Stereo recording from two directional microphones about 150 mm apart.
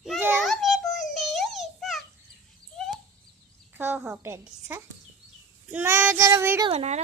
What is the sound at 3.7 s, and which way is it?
A child's voice, 10° right (ahead or behind).